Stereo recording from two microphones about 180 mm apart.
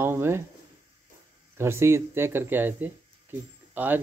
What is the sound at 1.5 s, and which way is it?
Speech, 15° right (ahead or behind).